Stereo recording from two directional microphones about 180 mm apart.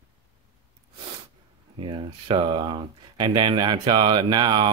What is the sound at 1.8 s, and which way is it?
Speech, 30° right (ahead or behind).